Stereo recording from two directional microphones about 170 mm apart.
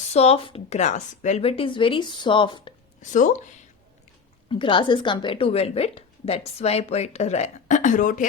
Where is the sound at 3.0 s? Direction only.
50° left (ahead or behind).